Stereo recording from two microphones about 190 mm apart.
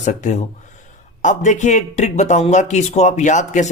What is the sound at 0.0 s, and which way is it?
Speech, 40° left (ahead or behind).